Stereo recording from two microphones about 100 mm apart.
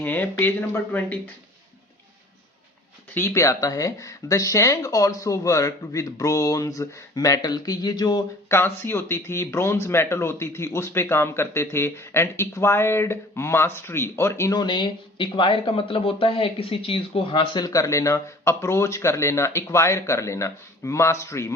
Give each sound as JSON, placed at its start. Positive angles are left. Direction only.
{"t": 0.0, "sound": "speech", "side_deg": 20}
{"t": 3.2, "sound": "speech", "side_deg": 25}
{"t": 8.4, "sound": "speech", "side_deg": 25}
{"t": 14.5, "sound": "speech", "side_deg": 50}
{"t": 17.7, "sound": "speech", "side_deg": 35}